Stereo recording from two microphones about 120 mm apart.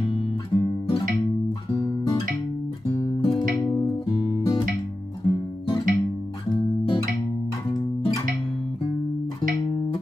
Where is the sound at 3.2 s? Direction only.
40° left (ahead or behind).